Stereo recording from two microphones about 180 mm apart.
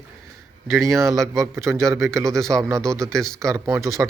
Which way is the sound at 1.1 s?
15° right (ahead or behind).